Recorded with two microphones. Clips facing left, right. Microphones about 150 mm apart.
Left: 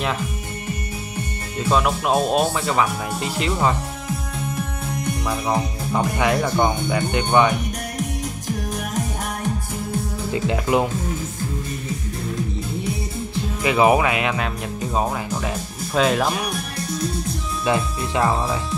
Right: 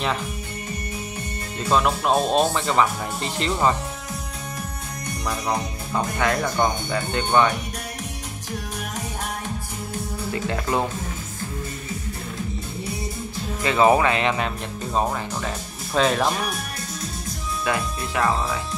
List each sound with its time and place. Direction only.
1.7 s speech: 5° left (ahead or behind)
5.9 s speech: 15° left (ahead or behind)
10.3 s speech: 15° left (ahead or behind)
13.6 s speech: 15° left (ahead or behind)
17.6 s speech: 20° left (ahead or behind)